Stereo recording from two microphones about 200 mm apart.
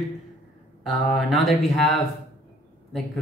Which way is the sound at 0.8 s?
Centre (ahead or behind).